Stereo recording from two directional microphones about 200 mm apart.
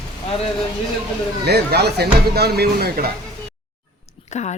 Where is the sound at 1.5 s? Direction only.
55° right (ahead or behind).